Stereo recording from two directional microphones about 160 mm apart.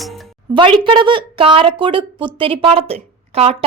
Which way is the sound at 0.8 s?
30° right (ahead or behind).